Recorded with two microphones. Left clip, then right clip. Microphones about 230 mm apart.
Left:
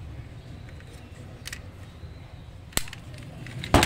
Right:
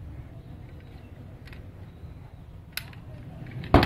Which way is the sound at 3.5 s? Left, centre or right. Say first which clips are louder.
Even; centre.